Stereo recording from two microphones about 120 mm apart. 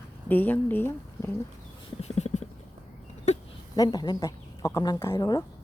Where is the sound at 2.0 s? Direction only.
65° left (ahead or behind).